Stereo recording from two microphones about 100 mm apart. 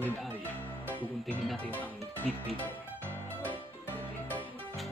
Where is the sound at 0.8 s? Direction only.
15° left (ahead or behind).